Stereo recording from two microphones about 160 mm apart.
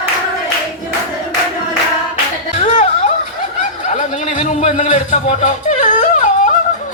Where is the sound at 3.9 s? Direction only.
45° left (ahead or behind).